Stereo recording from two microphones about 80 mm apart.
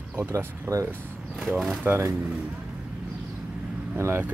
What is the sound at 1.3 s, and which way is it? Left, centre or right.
Speech, centre.